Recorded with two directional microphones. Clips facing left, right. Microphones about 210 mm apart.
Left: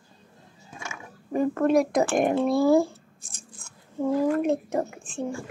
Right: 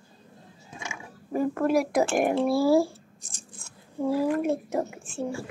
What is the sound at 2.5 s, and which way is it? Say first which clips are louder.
Speech: left 2 dB; 20° left (ahead or behind).